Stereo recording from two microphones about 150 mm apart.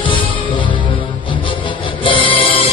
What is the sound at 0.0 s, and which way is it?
Music, 35° left (ahead or behind).